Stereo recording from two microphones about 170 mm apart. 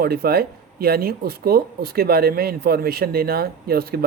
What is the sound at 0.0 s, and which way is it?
Speech, 65° right (ahead or behind).